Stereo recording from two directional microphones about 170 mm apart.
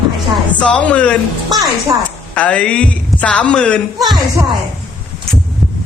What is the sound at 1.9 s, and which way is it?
Child singing, 20° right (ahead or behind).